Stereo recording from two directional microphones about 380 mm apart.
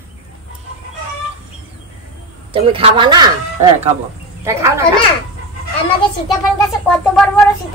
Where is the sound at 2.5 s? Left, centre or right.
Centre.